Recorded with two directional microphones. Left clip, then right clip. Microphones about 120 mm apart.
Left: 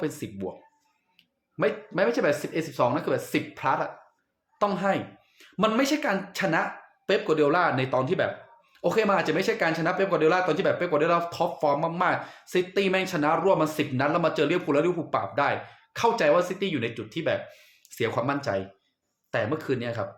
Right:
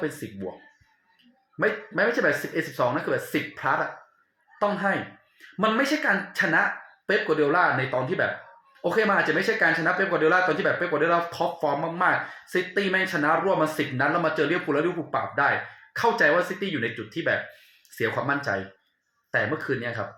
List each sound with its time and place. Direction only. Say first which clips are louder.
0.0 s speech: even; 25° left (ahead or behind)
2.0 s a woman's voice: right 1 dB; 30° left (ahead or behind)